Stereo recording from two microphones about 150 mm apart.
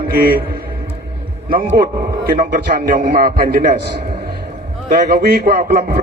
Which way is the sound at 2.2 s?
75° right (ahead or behind).